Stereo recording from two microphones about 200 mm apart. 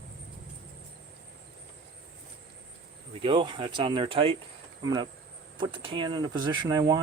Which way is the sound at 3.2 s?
25° right (ahead or behind).